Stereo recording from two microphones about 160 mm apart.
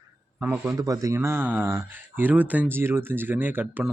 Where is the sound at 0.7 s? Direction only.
20° right (ahead or behind).